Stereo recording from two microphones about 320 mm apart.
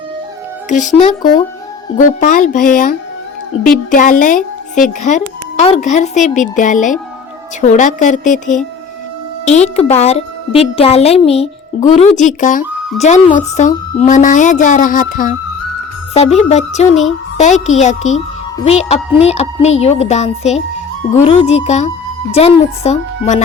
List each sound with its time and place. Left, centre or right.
0.7 s speech: left
3.9 s speech: left
17.1 s music: left
17.7 s speech: left